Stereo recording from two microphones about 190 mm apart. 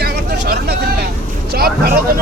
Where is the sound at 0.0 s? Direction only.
55° right (ahead or behind).